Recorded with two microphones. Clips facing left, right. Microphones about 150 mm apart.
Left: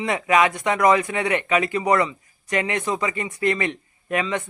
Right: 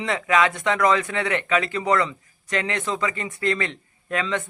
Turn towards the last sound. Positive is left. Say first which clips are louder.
# left 2 dB
turn(degrees=15)  # may be behind; listen again after turning